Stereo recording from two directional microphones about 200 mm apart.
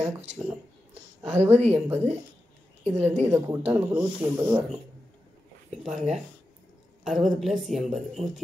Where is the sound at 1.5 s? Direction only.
30° right (ahead or behind).